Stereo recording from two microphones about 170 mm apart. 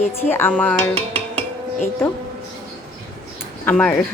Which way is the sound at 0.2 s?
15° left (ahead or behind).